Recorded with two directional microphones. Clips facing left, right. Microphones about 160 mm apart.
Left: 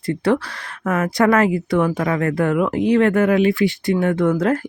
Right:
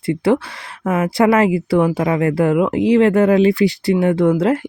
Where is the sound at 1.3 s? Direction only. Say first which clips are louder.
Right 2 dB; 30° right (ahead or behind).